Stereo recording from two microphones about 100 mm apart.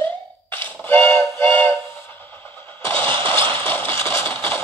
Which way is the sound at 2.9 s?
60° right (ahead or behind).